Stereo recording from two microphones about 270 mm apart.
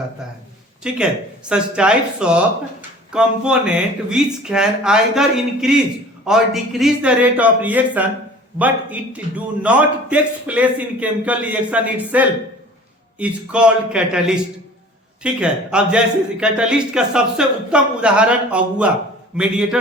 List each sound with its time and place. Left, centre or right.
0.8 s a man's voice: centre